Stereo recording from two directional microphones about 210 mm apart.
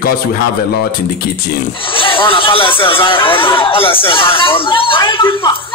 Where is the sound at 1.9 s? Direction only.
25° left (ahead or behind).